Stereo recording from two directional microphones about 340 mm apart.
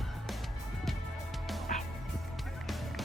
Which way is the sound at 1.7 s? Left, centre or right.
Left.